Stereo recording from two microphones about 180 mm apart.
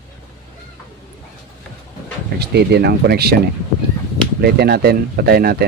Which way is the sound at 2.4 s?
65° right (ahead or behind).